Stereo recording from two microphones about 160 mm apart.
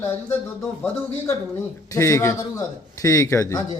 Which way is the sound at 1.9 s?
15° left (ahead or behind).